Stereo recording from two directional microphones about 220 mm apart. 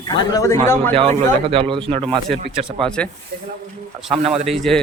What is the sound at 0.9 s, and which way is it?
Speech, 25° right (ahead or behind).